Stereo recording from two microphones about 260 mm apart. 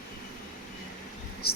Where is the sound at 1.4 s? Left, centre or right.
Left.